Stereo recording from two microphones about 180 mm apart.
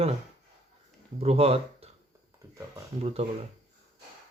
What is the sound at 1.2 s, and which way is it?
Speech, 35° right (ahead or behind).